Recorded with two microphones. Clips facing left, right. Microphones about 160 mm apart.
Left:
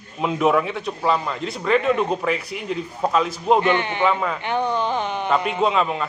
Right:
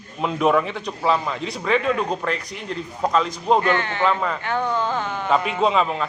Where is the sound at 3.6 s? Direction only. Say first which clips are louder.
Left 1 dB; 20° left (ahead or behind).